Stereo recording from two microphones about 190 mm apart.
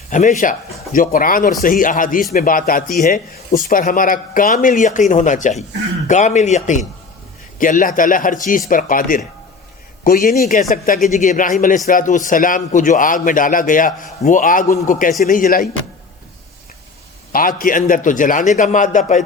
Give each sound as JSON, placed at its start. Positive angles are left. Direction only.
{"t": 0.1, "sound": "a man's voice", "side_deg": 40}
{"t": 17.3, "sound": "a man's voice", "side_deg": 45}